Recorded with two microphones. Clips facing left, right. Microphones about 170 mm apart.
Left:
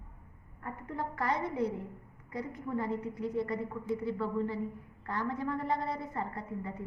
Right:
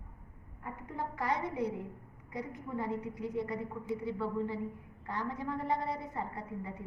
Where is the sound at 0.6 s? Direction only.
15° right (ahead or behind).